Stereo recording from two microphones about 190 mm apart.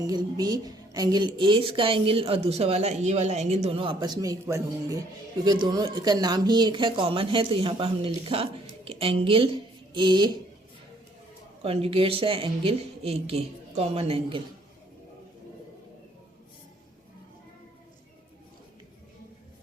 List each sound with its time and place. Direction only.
0.1 s a woman's voice: 20° right (ahead or behind)
11.6 s a woman's voice: 30° right (ahead or behind)